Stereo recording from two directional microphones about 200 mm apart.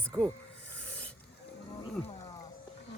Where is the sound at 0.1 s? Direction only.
20° right (ahead or behind).